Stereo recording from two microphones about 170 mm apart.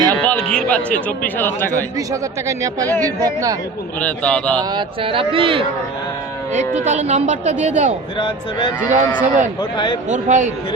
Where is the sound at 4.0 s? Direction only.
5° left (ahead or behind).